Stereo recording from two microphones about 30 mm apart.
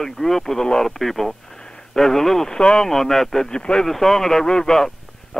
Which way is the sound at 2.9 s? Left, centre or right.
Centre.